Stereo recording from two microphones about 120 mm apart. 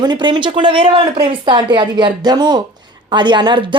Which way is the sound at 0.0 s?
40° right (ahead or behind).